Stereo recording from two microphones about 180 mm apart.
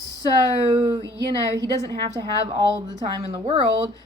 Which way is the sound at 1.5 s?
25° right (ahead or behind).